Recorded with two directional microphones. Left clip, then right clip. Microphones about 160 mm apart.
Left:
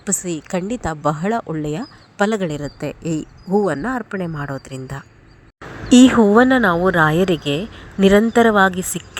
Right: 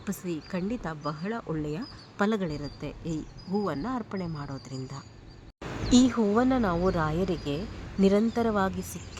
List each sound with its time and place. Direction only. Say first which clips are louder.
0.0 s speech: left 11 dB; 40° left (ahead or behind)
1.0 s speech: left 17 dB; 50° left (ahead or behind)
1.5 s speech: left 9 dB; 35° left (ahead or behind)
6.2 s a woman's voice: left 13 dB; 20° left (ahead or behind)